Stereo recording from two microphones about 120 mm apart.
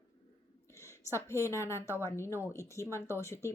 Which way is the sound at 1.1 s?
25° left (ahead or behind).